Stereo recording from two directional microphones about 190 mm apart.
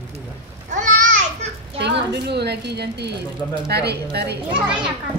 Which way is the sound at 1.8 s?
60° right (ahead or behind).